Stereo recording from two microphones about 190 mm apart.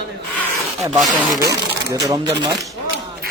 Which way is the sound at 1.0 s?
Centre (ahead or behind).